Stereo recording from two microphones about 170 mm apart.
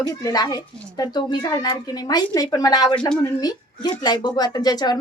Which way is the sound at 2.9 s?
5° left (ahead or behind).